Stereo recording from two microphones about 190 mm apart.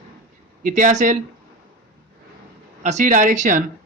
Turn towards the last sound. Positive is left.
turn(degrees=-40)  # may be behind; listen again after turning